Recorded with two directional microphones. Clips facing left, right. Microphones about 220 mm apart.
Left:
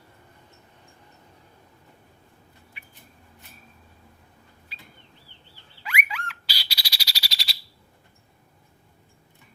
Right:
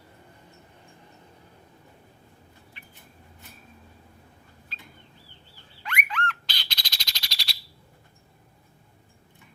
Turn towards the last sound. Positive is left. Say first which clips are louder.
# left 2 dB
turn(degrees=0)  # may be behind; listen again after turning